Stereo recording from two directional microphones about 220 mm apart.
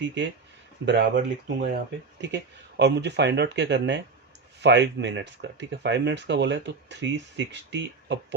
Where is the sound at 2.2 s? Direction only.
50° right (ahead or behind).